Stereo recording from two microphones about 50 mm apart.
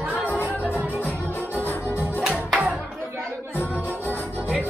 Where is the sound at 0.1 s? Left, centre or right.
Left.